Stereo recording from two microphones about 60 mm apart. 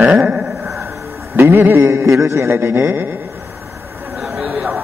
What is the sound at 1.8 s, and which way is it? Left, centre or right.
Speech, right.